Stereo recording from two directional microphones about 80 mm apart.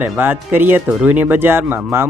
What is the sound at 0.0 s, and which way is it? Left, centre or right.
Speech, right.